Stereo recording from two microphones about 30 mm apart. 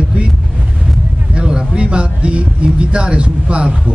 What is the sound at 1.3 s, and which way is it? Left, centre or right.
A man's voice, right.